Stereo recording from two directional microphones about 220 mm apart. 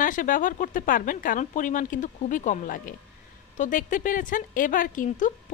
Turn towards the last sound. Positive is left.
turn(degrees=35)  # may be behind; listen again after turning